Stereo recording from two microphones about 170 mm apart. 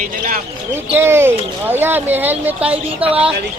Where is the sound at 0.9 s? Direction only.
15° right (ahead or behind).